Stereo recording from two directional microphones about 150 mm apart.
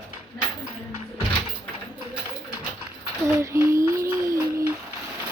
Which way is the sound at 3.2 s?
20° right (ahead or behind).